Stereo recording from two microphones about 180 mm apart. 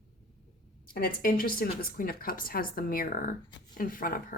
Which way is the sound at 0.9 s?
55° left (ahead or behind).